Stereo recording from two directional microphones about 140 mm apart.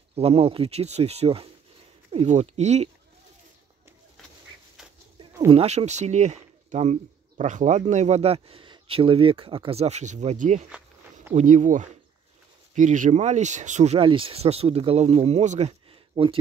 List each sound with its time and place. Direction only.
0.1 s speech: 45° right (ahead or behind)
5.5 s speech: 45° right (ahead or behind)
13.9 s speech: 40° right (ahead or behind)
16.1 s speech: 35° right (ahead or behind)